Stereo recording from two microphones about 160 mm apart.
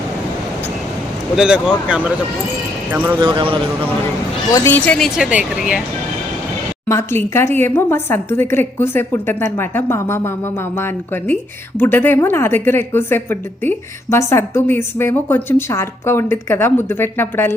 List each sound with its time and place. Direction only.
1.4 s speech: 5° right (ahead or behind)
2.9 s speech: 10° right (ahead or behind)
3.2 s speech: 30° right (ahead or behind)
4.5 s speech: 15° left (ahead or behind); by 5.8 s 5° right (ahead or behind)
6.8 s a woman's voice: 15° left (ahead or behind)